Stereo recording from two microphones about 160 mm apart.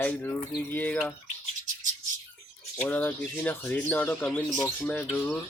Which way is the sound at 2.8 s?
10° left (ahead or behind).